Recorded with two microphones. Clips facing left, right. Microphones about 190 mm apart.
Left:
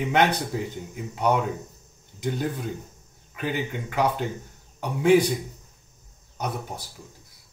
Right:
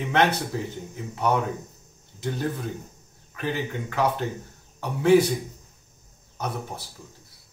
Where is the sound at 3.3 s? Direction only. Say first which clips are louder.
Even; 15° left (ahead or behind).